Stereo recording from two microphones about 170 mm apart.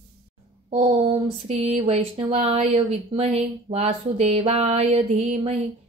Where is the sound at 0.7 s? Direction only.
35° right (ahead or behind).